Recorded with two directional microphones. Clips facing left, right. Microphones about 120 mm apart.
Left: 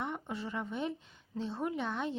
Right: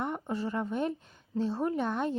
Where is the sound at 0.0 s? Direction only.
45° right (ahead or behind).